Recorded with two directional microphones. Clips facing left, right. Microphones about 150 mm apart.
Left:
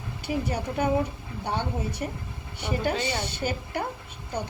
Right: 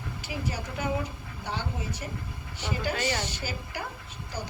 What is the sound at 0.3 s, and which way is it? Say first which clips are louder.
A woman's voice: left 7 dB; 55° left (ahead or behind).